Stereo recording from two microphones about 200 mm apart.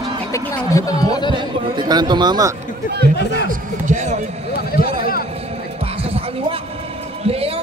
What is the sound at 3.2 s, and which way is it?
Speech, 55° left (ahead or behind).